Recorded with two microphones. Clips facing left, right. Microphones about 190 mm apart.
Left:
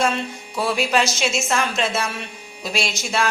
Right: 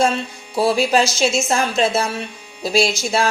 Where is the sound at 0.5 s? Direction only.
35° right (ahead or behind).